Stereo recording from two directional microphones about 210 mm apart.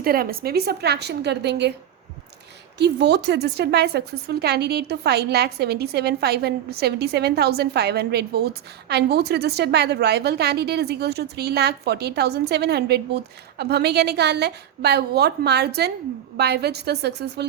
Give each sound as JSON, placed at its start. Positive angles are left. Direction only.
{"t": 0.0, "sound": "a woman's voice", "side_deg": -45}
{"t": 2.7, "sound": "a woman's voice", "side_deg": -55}